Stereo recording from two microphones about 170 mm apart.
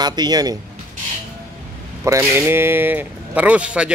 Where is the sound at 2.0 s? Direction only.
15° right (ahead or behind).